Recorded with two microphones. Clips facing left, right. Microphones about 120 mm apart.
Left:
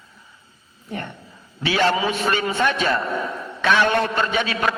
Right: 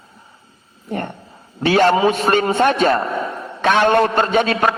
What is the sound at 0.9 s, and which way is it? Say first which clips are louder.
A man's voice: right 6 dB; 50° right (ahead or behind).